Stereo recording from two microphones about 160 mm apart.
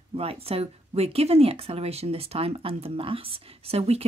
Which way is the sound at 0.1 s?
35° right (ahead or behind).